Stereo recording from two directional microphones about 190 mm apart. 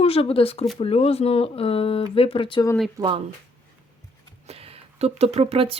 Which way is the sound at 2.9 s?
25° right (ahead or behind).